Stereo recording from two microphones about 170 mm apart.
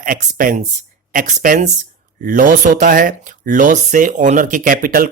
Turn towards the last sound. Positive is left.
turn(degrees=-55)  # may be behind; listen again after turning